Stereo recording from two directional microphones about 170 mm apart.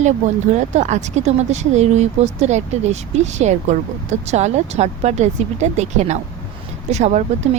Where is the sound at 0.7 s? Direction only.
45° right (ahead or behind).